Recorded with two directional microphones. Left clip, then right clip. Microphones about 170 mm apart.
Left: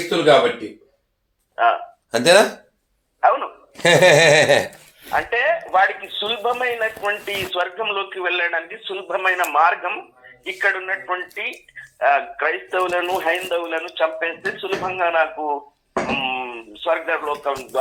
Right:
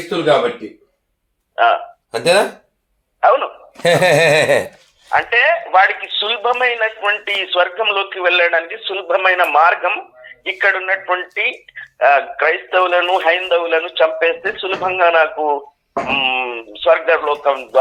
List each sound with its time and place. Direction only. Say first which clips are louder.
1.5 s speech: right 4 dB; 25° right (ahead or behind)
2.0 s speech: even; 35° left (ahead or behind)
3.2 s speech: right 4 dB; 25° right (ahead or behind)
3.8 s speech: even; 5° left (ahead or behind)
5.1 s speech: right 6 dB; 25° right (ahead or behind)